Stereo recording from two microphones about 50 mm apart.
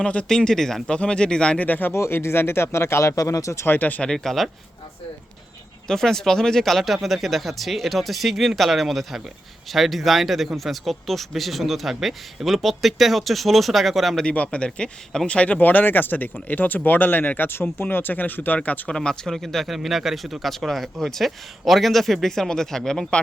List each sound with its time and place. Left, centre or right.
0.0 s speech: left
0.3 s speech: centre
1.5 s speech: left
1.9 s speech: left
3.7 s speech: left
4.0 s speech: centre
5.9 s speech: centre
14.3 s speech: left
15.5 s speech: left
18.9 s speech: centre